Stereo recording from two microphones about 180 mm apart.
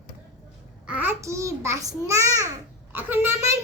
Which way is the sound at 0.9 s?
10° right (ahead or behind).